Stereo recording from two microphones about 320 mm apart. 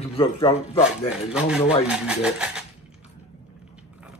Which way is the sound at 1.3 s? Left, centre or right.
Centre.